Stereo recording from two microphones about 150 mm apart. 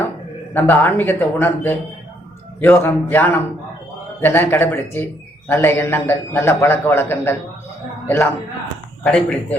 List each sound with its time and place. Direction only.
0.5 s a man's voice: 10° left (ahead or behind)